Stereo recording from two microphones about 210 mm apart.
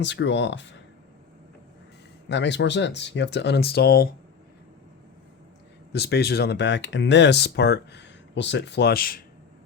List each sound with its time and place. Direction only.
0.0 s speech: 60° left (ahead or behind)
2.3 s speech: 55° left (ahead or behind)
5.9 s speech: 50° left (ahead or behind)